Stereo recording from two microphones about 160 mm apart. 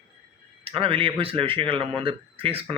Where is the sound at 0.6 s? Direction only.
35° right (ahead or behind).